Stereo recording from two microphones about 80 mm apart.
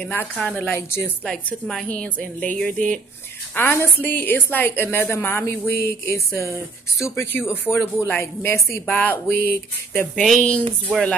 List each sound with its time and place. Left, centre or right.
0.4 s speech: centre
1.2 s a woman's voice: centre
3.5 s speech: left
7.3 s speech: left
10.1 s a woman's voice: centre